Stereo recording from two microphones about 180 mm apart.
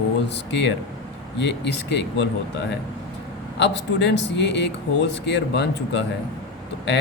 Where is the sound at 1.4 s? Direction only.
75° left (ahead or behind).